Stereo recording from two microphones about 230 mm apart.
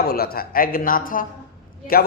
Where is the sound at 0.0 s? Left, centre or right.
Left.